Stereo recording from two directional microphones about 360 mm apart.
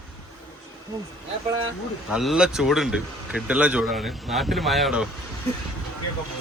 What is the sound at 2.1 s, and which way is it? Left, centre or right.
A man's voice, centre.